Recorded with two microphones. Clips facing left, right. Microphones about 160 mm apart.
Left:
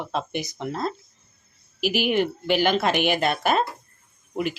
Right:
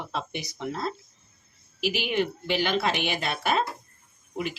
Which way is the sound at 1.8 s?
45° left (ahead or behind).